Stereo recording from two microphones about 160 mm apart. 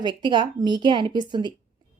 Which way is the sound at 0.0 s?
30° right (ahead or behind).